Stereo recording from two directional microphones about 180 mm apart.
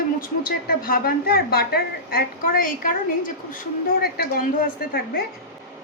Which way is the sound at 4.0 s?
60° left (ahead or behind).